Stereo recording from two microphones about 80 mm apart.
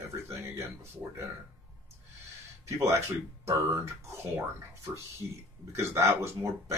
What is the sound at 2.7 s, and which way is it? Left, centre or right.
Speech, right.